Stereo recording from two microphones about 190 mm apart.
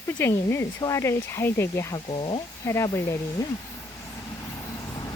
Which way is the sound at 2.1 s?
25° left (ahead or behind).